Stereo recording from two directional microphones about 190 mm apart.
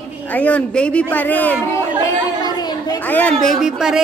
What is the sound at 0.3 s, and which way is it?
A woman's voice, 10° left (ahead or behind).